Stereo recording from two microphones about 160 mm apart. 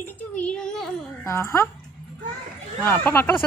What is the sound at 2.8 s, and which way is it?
Speech, 15° left (ahead or behind).